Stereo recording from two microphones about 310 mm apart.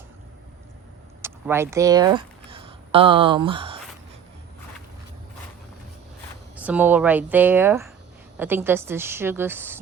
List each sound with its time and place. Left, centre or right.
1.2 s speech: centre
6.6 s a woman's voice: centre